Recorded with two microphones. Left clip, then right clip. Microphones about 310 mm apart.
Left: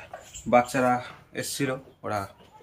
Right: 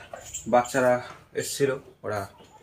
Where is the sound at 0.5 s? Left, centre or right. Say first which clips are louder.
Even; centre.